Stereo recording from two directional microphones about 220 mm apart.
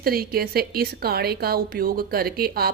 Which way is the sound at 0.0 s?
45° right (ahead or behind).